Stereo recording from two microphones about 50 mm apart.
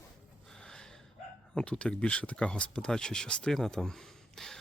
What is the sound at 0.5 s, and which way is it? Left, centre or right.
Gasp, centre.